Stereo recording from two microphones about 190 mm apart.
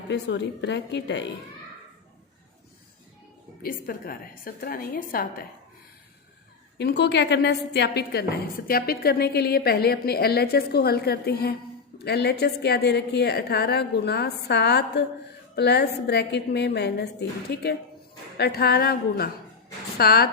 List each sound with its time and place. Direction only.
0.1 s a woman's voice: 65° left (ahead or behind)
3.6 s a woman's voice: 50° left (ahead or behind)
6.7 s a woman's voice: 65° left (ahead or behind)